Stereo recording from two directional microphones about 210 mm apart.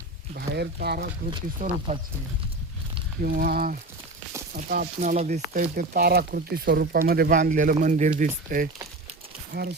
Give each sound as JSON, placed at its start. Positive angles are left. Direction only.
{"t": 0.3, "sound": "speech", "side_deg": -50}
{"t": 3.2, "sound": "speech", "side_deg": -45}
{"t": 9.5, "sound": "speech", "side_deg": -55}